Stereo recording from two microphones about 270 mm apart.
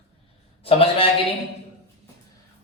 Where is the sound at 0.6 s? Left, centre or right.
Left.